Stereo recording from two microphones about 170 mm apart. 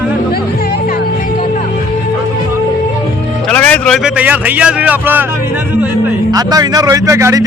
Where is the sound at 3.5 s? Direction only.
10° left (ahead or behind).